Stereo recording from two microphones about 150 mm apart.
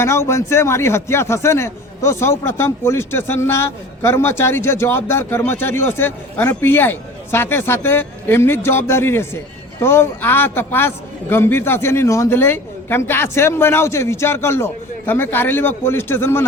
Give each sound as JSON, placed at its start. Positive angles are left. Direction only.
{"t": 0.0, "sound": "a man's voice", "side_deg": 15}